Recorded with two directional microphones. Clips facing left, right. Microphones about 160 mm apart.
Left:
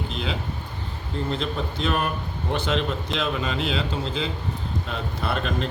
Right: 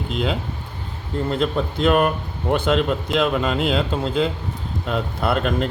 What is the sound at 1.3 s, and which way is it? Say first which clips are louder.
Speech: right 7 dB; 55° right (ahead or behind).